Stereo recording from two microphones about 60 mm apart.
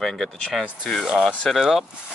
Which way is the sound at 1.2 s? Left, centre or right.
Centre.